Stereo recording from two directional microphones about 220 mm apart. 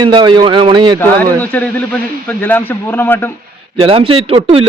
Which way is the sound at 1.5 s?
5° left (ahead or behind).